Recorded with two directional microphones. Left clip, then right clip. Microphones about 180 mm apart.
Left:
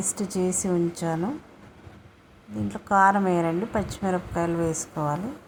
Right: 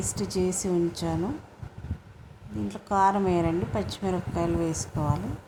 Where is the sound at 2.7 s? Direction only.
20° left (ahead or behind).